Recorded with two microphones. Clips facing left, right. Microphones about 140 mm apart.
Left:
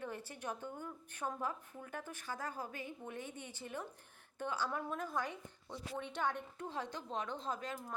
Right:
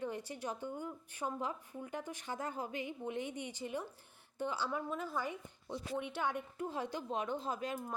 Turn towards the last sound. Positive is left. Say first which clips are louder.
# right 3 dB
turn(degrees=-15)  # may be behind; listen again after turning